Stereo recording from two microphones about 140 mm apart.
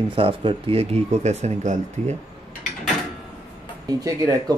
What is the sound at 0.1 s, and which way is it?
Speech, 40° right (ahead or behind).